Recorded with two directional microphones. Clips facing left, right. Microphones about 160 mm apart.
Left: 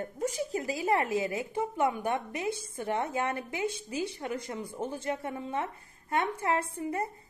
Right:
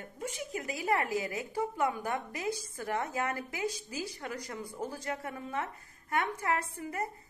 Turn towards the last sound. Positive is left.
turn(degrees=25)  # may be behind; listen again after turning